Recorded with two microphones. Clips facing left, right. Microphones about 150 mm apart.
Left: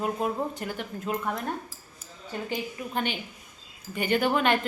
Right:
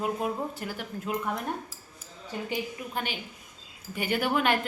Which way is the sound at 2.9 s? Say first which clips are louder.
Left 6 dB; 5° right (ahead or behind).